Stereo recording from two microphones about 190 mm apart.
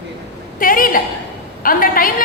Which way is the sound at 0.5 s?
45° left (ahead or behind).